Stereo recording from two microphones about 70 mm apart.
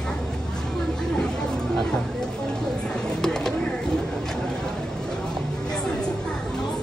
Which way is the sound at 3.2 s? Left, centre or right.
Centre.